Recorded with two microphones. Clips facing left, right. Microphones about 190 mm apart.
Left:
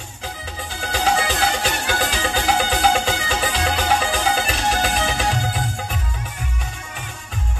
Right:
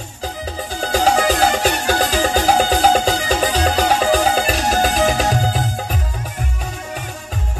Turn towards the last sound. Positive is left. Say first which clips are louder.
# right 4 dB
turn(degrees=-40)  # may be behind; listen again after turning